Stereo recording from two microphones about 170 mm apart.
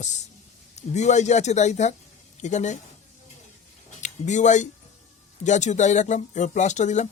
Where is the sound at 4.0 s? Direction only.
45° left (ahead or behind).